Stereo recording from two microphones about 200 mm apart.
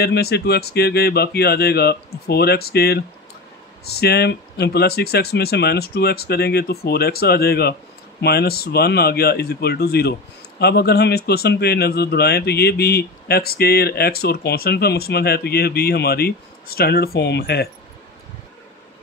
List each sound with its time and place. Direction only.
0.0 s speech: 50° left (ahead or behind)